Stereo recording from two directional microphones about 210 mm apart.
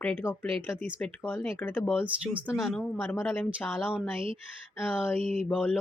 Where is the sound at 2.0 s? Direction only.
5° right (ahead or behind).